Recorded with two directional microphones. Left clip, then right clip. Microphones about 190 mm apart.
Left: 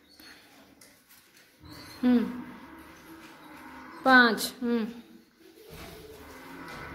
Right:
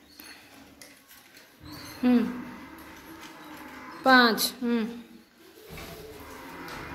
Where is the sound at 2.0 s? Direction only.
10° left (ahead or behind).